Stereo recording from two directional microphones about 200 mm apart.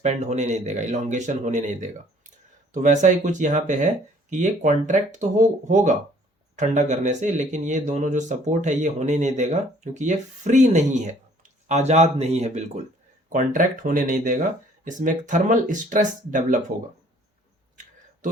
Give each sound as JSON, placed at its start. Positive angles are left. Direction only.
{"t": 0.0, "sound": "a man's voice", "side_deg": -35}